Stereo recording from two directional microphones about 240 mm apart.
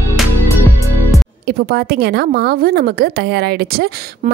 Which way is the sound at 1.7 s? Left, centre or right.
Right.